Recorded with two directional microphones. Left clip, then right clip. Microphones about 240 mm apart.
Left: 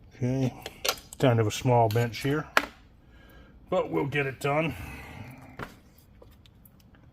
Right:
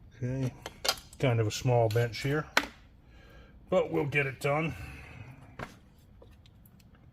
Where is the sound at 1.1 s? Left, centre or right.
Left.